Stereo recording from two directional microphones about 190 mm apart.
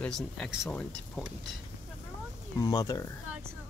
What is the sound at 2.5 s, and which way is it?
Speech, 20° left (ahead or behind).